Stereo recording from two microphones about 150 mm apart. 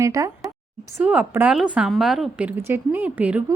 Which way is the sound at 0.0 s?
20° right (ahead or behind).